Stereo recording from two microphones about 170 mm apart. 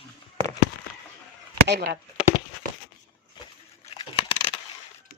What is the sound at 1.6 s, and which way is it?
Speech, 80° right.